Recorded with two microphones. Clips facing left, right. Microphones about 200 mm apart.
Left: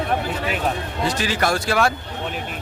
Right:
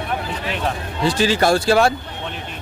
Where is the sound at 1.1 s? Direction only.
30° right (ahead or behind).